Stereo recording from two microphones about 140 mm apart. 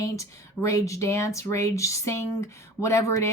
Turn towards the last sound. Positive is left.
turn(degrees=20)  # may be behind; listen again after turning